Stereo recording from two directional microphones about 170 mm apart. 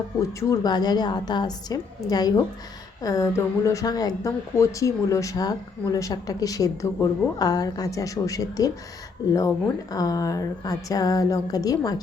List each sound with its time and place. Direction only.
0.2 s speech: 20° left (ahead or behind)
9.9 s speech: 20° left (ahead or behind)